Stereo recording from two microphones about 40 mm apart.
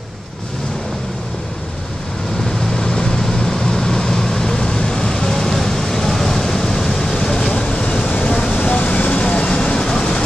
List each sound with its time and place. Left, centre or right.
2.6 s vehicle: centre